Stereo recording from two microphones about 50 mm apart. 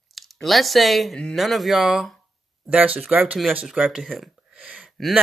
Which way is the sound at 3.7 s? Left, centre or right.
Centre.